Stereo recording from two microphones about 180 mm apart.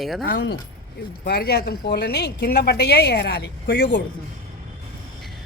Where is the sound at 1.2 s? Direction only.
60° left (ahead or behind).